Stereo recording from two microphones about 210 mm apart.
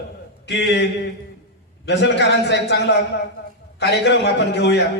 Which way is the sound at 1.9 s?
55° left (ahead or behind).